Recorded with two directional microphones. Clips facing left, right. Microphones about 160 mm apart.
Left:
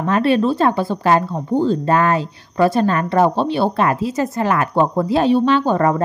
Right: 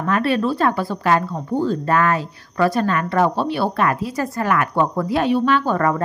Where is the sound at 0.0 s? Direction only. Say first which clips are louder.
Left 3 dB; 25° left (ahead or behind).